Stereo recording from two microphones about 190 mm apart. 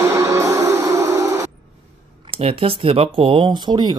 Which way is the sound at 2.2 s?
30° right (ahead or behind).